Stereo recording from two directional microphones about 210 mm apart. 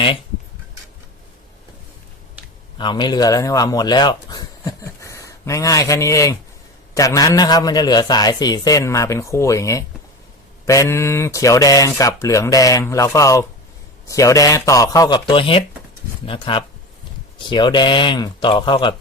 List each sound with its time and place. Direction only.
2.7 s a man's voice: 20° left (ahead or behind)